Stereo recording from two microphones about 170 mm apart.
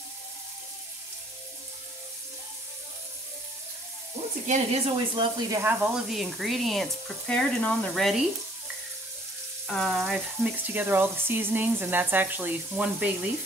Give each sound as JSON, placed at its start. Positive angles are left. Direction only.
{"t": 4.5, "sound": "speech", "side_deg": -40}
{"t": 5.5, "sound": "speech", "side_deg": -10}
{"t": 9.7, "sound": "speech", "side_deg": 0}
{"t": 10.7, "sound": "speech", "side_deg": -10}